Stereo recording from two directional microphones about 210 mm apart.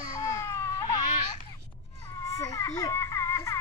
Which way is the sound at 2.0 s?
15° left (ahead or behind).